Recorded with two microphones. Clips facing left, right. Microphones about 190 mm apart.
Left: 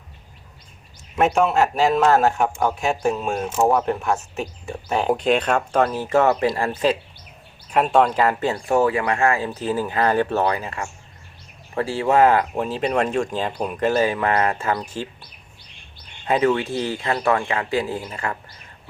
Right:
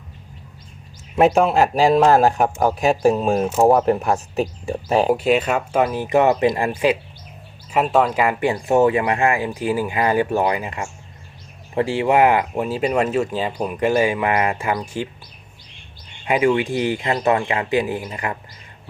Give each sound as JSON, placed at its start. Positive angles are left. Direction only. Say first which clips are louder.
{"t": 1.1, "sound": "a man's voice", "louder": "right 3 dB", "side_deg": -35}
{"t": 5.0, "sound": "speech", "louder": "right 2 dB", "side_deg": -5}
{"t": 16.2, "sound": "speech", "louder": "right 2 dB", "side_deg": -10}